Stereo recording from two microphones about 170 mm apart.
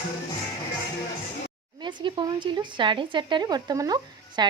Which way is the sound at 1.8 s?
30° right (ahead or behind).